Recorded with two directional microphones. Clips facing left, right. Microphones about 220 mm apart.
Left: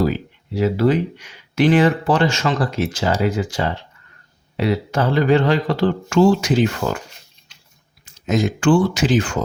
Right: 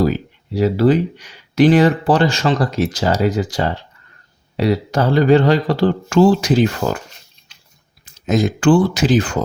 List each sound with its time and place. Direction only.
0.0 s speech: 40° right (ahead or behind)
8.0 s speech: 35° right (ahead or behind)